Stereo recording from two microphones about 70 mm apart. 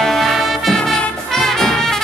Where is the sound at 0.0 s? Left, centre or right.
Centre.